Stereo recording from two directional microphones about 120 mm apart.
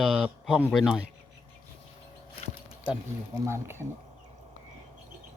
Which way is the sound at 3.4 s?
20° right (ahead or behind).